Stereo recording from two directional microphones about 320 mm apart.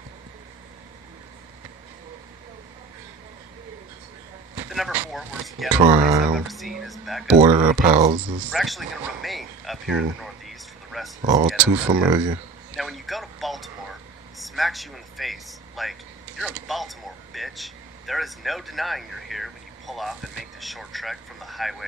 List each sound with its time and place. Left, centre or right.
4.6 s a sound: centre
5.7 s speech: centre
6.3 s speech: centre
7.3 s speech: right
8.5 s speech: centre
10.2 s a sound: centre
11.7 s speech: centre
12.7 s a sound: centre
14.4 s speech: centre